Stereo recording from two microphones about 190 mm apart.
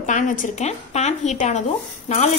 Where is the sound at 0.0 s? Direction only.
40° left (ahead or behind).